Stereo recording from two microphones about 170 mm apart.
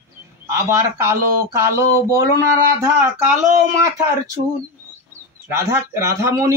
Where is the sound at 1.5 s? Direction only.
15° right (ahead or behind).